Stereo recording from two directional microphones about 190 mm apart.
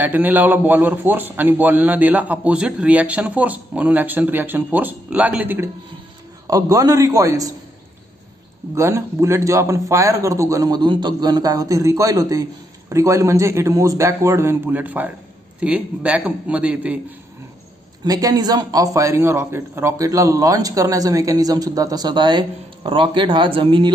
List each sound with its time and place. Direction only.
0.0 s a man's voice: 10° right (ahead or behind)
8.7 s a man's voice: 15° right (ahead or behind)
18.0 s a man's voice: 20° right (ahead or behind)